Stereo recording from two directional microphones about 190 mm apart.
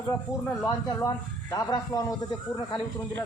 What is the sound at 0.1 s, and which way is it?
Speech, 15° left (ahead or behind).